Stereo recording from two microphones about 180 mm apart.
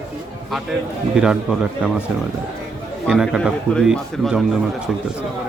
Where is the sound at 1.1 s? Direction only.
5° right (ahead or behind).